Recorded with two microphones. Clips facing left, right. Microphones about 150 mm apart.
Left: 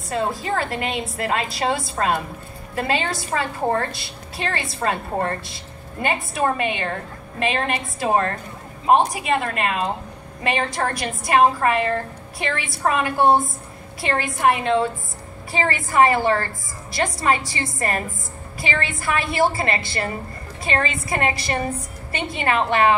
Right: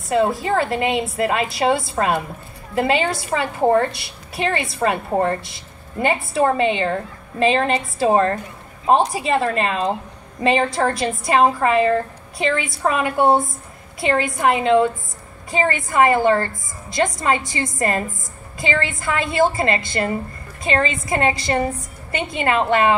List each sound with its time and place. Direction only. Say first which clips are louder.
0.4 s a woman's voice: right 5 dB; 25° right (ahead or behind)